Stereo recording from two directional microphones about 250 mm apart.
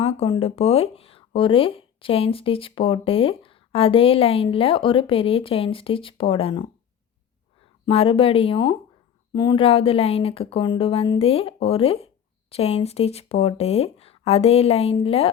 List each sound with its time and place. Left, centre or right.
0.0 s speech: left
7.9 s speech: left